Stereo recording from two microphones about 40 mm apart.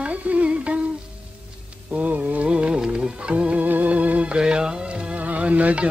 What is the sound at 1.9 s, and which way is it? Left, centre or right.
Music, right.